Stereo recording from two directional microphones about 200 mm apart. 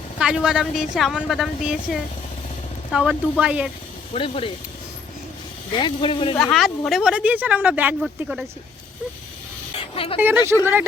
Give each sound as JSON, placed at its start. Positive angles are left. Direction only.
{"t": 0.2, "sound": "speech", "side_deg": -5}
{"t": 4.1, "sound": "speech", "side_deg": 25}
{"t": 5.8, "sound": "speech", "side_deg": 25}
{"t": 6.3, "sound": "speech", "side_deg": 0}
{"t": 9.7, "sound": "vehicle", "side_deg": 25}
{"t": 10.2, "sound": "speech", "side_deg": -10}